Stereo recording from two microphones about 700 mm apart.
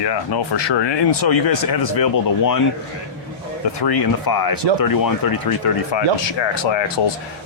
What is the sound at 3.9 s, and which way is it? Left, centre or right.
Speech, left.